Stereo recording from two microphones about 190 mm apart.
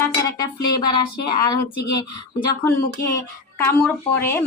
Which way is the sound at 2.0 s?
15° left (ahead or behind).